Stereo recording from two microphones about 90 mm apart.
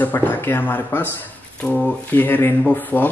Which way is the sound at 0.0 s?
20° left (ahead or behind).